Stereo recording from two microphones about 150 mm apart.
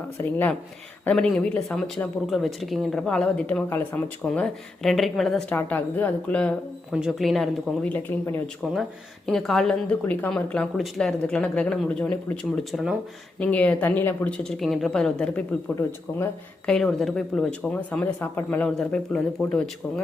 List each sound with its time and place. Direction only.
0.2 s speech: 10° left (ahead or behind)
5.5 s speech: 10° left (ahead or behind)
6.9 s speech: centre (ahead or behind)
13.4 s speech: 10° left (ahead or behind)
16.6 s speech: 5° left (ahead or behind)